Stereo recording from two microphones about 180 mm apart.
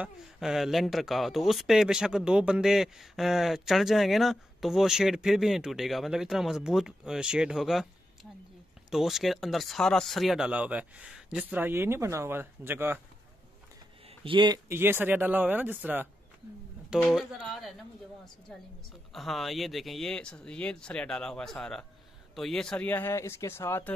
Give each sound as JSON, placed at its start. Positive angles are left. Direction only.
{"t": 0.0, "sound": "speech", "side_deg": 0}
{"t": 14.0, "sound": "speech", "side_deg": -30}
{"t": 14.7, "sound": "speech", "side_deg": -10}
{"t": 19.1, "sound": "speech", "side_deg": 0}